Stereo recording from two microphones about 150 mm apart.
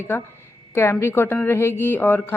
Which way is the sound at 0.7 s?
15° left (ahead or behind).